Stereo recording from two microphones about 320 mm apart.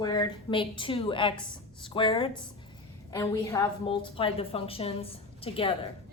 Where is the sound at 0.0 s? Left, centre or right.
Centre.